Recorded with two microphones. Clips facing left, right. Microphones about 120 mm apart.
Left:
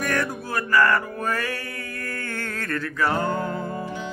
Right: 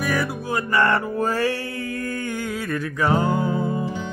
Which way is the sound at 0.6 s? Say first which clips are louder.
Even; 25° right (ahead or behind).